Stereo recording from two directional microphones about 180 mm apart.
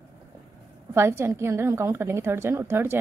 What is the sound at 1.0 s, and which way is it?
A woman's voice, 15° right (ahead or behind).